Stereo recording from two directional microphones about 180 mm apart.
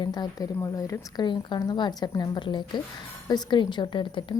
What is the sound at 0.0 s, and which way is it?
Speech, 25° left (ahead or behind).